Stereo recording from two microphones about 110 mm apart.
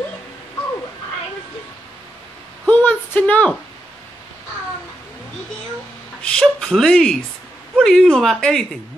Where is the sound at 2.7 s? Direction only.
15° left (ahead or behind).